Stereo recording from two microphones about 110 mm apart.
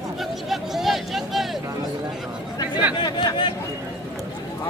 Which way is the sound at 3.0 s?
45° left (ahead or behind).